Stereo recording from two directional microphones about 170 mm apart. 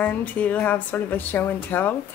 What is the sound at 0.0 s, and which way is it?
Speech, 10° left (ahead or behind).